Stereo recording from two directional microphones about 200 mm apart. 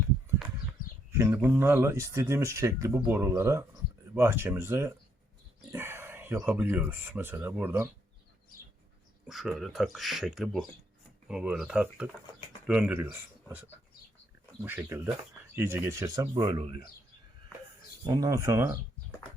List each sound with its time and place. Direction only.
1.1 s speech: 10° right (ahead or behind)
9.2 s speech: centre (ahead or behind); by 16.6 s 20° right (ahead or behind)
18.0 s speech: 20° right (ahead or behind)